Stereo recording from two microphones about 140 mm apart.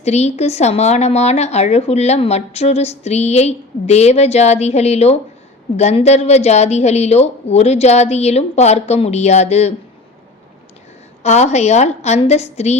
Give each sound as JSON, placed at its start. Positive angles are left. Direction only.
{"t": 0.0, "sound": "speech", "side_deg": 50}
{"t": 11.2, "sound": "speech", "side_deg": 50}